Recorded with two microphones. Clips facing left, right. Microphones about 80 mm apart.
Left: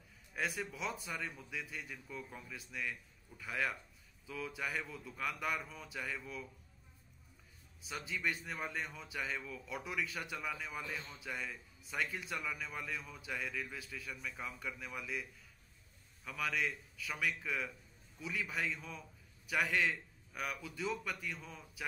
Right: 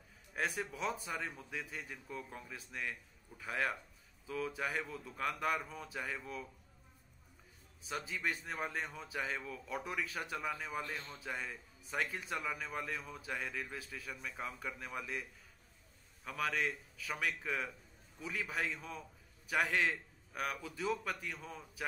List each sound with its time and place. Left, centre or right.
0.6 s a man's voice: right
2.5 s a man's voice: right
5.9 s speech: right
7.9 s a man's voice: right
14.1 s speech: right
16.3 s a man's voice: right